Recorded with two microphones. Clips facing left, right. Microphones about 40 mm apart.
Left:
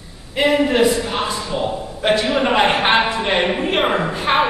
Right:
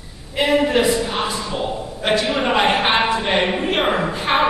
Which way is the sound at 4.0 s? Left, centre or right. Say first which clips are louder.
Left 1 dB; centre.